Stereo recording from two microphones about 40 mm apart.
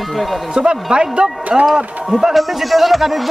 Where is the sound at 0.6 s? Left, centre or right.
Centre.